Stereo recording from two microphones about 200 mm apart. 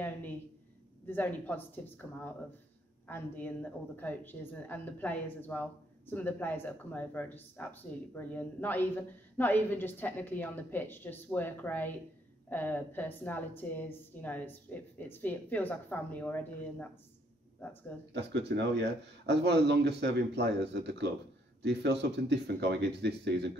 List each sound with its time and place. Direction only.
0.0 s a sound: 10° left (ahead or behind)
1.0 s a woman's voice: 10° left (ahead or behind)
18.1 s speech: 60° right (ahead or behind)